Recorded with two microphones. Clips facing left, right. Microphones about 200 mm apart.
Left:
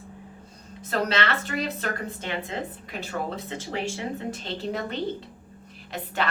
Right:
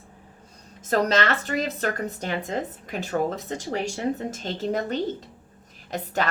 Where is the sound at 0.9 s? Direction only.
45° right (ahead or behind).